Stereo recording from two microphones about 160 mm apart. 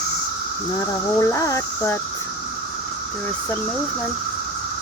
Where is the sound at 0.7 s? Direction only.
20° left (ahead or behind).